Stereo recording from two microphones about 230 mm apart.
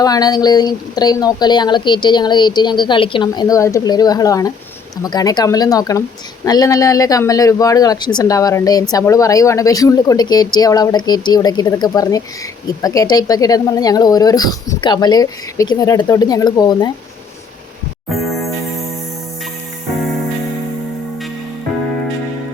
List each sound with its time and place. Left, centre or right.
0.0 s speech: centre